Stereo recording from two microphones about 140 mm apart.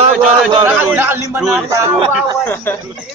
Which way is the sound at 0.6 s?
15° right (ahead or behind).